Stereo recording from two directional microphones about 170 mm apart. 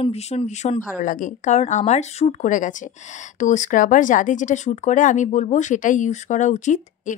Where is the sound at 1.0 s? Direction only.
50° left (ahead or behind).